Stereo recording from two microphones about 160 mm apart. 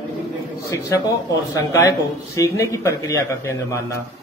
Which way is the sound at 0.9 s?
20° left (ahead or behind).